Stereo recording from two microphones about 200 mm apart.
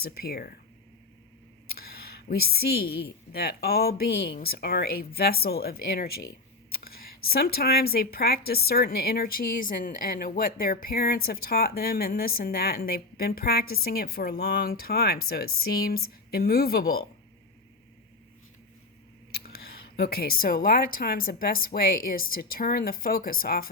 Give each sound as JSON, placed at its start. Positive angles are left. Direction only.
{"t": 0.0, "sound": "speech", "side_deg": 50}
{"t": 1.8, "sound": "speech", "side_deg": 50}
{"t": 19.3, "sound": "speech", "side_deg": 50}